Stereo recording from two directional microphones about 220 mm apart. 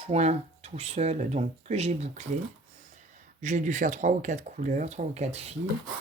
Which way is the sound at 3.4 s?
35° right (ahead or behind).